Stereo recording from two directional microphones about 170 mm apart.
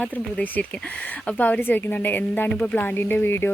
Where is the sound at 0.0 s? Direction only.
10° left (ahead or behind).